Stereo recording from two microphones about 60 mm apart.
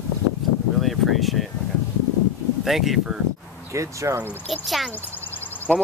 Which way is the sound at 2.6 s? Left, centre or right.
Centre.